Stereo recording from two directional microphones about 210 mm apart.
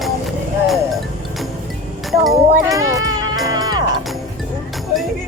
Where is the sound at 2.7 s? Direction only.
15° right (ahead or behind).